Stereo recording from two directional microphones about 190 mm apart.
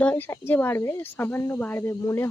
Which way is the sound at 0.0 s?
10° left (ahead or behind).